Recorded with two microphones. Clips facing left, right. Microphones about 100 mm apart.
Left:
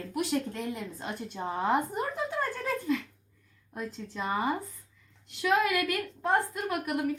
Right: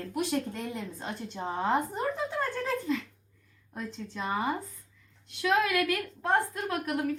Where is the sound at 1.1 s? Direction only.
15° left (ahead or behind).